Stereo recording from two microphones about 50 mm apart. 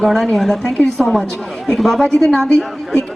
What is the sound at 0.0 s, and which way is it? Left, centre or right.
A woman's voice, centre.